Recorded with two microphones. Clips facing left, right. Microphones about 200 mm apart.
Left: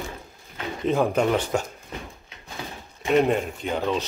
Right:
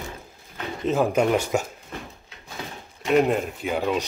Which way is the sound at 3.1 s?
5° right (ahead or behind).